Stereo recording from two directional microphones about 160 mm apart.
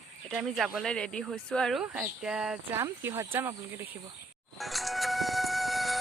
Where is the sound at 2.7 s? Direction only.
15° right (ahead or behind).